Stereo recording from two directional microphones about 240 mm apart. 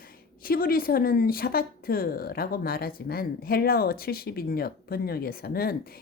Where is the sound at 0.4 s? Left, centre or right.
Left.